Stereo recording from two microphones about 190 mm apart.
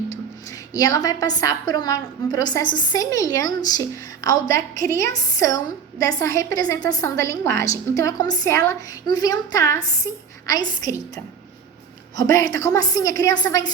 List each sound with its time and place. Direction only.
0.7 s a woman's voice: 20° left (ahead or behind)
12.1 s a woman's voice: 20° left (ahead or behind)